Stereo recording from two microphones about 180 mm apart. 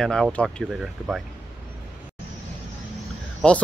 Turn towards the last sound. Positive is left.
turn(degrees=5)  # may be behind; listen again after turning